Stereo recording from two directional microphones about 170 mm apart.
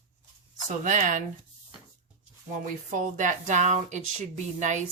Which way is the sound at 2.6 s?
50° right (ahead or behind).